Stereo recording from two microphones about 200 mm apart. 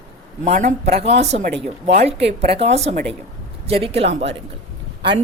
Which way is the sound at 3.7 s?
30° right (ahead or behind).